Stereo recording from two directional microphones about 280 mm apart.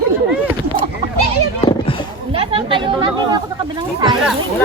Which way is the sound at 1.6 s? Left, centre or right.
Centre.